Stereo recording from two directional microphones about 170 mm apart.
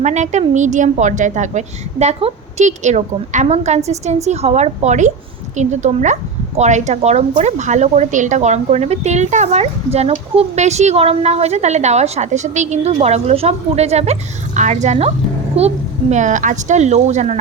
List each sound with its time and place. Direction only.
0.0 s a woman's voice: 45° right (ahead or behind)